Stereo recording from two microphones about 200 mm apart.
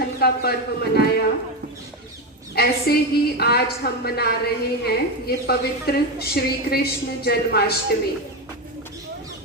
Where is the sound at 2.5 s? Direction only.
50° left (ahead or behind).